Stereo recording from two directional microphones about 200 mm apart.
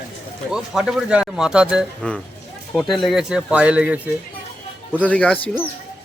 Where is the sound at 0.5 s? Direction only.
Centre (ahead or behind).